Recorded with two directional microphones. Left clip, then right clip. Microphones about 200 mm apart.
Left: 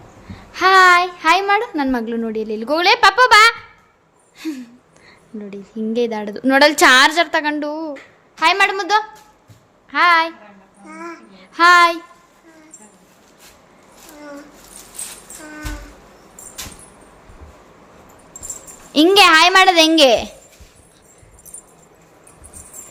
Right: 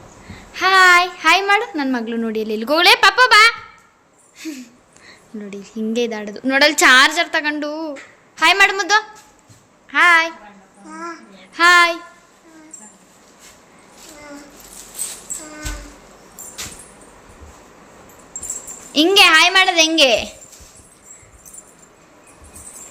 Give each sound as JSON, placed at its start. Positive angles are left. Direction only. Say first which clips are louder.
{"t": 0.5, "sound": "a child's voice", "louder": "left 1 dB", "side_deg": 20}
{"t": 4.4, "sound": "a sound", "louder": "left 3 dB", "side_deg": 20}
{"t": 5.0, "sound": "a child's voice", "louder": "even", "side_deg": 5}
{"t": 10.8, "sound": "child singing", "louder": "right 2 dB", "side_deg": 20}
{"t": 18.9, "sound": "a child's voice", "louder": "left 1 dB", "side_deg": 20}